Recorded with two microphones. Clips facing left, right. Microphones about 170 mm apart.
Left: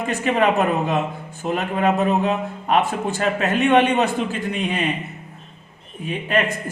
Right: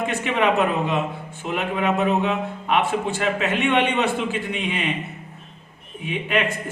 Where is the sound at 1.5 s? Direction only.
40° left (ahead or behind).